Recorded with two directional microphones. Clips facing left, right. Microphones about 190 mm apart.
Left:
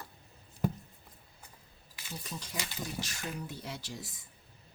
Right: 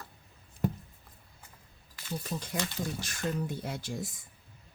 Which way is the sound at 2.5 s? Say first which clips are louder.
Right 4 dB; 55° right (ahead or behind).